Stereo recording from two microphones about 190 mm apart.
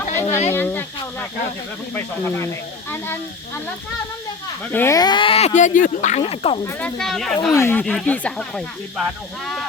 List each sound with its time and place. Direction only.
0.1 s a sound: 15° left (ahead or behind)
0.5 s speech: 10° left (ahead or behind)
2.2 s speech: 15° left (ahead or behind)
4.7 s speech: 15° left (ahead or behind); by 6.6 s 30° left (ahead or behind)
6.7 s speech: 5° left (ahead or behind)
7.5 s speech: 10° left (ahead or behind)